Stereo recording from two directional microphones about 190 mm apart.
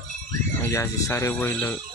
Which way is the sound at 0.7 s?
15° left (ahead or behind).